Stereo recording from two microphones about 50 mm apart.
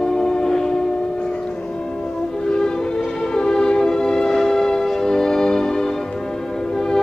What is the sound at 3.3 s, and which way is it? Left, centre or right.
Music, centre.